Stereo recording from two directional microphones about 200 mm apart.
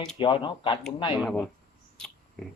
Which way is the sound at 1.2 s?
5° right (ahead or behind).